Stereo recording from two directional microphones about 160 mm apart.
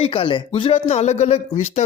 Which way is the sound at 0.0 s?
35° left (ahead or behind).